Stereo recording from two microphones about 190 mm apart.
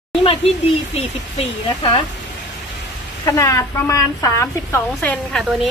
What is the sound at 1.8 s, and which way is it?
Speech, 25° left (ahead or behind).